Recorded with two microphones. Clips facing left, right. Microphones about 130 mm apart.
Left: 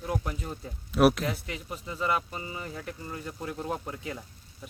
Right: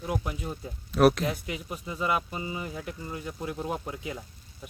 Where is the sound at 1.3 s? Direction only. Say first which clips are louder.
Right 2 dB; 15° right (ahead or behind).